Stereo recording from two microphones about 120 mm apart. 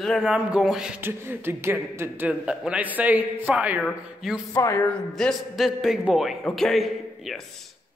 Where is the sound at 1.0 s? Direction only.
20° right (ahead or behind); by 4.3 s 5° right (ahead or behind).